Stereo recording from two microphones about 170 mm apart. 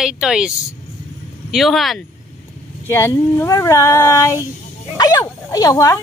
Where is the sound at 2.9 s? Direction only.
15° left (ahead or behind).